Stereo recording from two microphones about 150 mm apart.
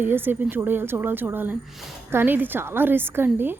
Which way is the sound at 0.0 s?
15° right (ahead or behind).